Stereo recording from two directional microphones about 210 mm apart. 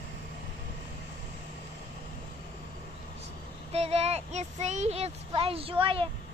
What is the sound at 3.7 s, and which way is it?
A child's voice, 30° right (ahead or behind).